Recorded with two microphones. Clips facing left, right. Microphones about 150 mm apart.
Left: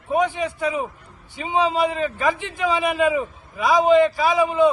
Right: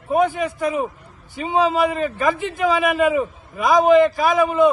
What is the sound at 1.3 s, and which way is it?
A man's voice, 45° right (ahead or behind).